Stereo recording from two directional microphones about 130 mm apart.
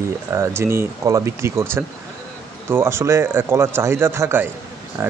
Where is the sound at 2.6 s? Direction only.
20° right (ahead or behind).